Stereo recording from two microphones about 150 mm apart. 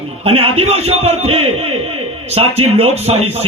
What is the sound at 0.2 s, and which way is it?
A man's voice, 40° right (ahead or behind).